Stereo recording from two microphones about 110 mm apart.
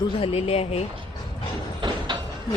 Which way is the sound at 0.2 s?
65° left (ahead or behind).